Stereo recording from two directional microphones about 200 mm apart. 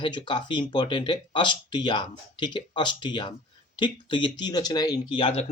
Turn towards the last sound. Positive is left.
turn(degrees=25)  # may be behind; listen again after turning